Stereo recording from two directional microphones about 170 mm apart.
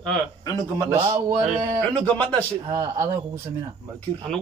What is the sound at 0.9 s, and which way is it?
Speech, 25° right (ahead or behind).